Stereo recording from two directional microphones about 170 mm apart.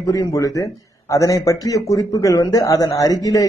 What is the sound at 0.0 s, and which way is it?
A man's voice, 20° left (ahead or behind).